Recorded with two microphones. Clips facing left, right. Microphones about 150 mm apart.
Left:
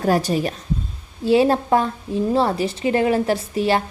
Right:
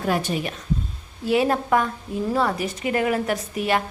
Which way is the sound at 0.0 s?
40° left (ahead or behind).